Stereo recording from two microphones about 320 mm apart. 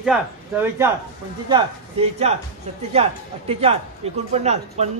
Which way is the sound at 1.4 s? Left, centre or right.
Centre.